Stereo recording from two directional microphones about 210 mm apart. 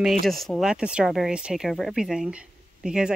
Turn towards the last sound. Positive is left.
turn(degrees=-5)  # may be behind; listen again after turning